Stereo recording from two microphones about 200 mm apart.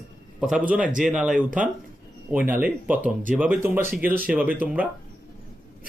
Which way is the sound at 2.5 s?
10° right (ahead or behind).